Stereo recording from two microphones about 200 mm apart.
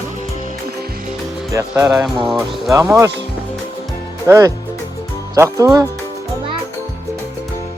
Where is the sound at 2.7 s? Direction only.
15° right (ahead or behind).